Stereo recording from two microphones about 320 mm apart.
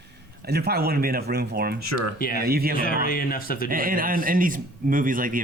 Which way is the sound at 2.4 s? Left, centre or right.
Right.